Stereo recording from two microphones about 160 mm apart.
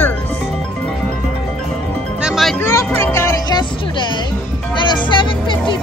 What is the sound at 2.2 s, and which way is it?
Music, centre (ahead or behind).